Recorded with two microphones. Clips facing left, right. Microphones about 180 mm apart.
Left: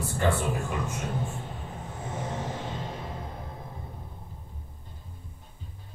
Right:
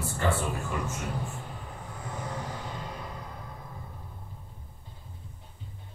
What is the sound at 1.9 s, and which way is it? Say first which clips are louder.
Music: left 3 dB; 25° left (ahead or behind).